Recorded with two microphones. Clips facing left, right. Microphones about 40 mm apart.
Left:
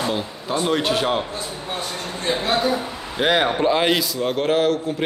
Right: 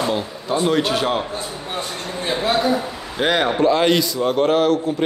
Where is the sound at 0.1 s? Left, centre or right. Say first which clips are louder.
Right 2 dB; centre.